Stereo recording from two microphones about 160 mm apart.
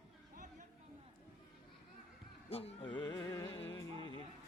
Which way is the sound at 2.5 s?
40° left (ahead or behind).